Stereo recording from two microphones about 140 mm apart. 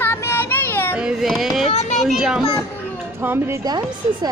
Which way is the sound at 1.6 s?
50° left (ahead or behind).